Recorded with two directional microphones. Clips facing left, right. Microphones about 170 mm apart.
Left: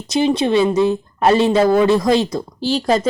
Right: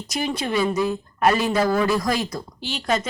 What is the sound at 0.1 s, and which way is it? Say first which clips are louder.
Speech: left 9 dB; 25° left (ahead or behind).